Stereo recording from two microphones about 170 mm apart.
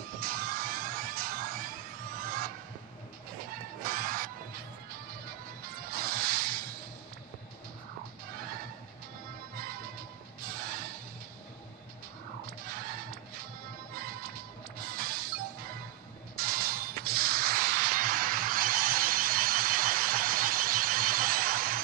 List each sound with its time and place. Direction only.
0.2 s music: 60° right (ahead or behind)
3.8 s music: 55° right (ahead or behind)
5.6 s music: 60° right (ahead or behind)
10.4 s music: 60° right (ahead or behind)
14.8 s music: 60° right (ahead or behind)